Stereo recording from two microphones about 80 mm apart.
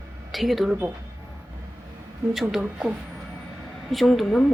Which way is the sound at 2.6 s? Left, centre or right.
Centre.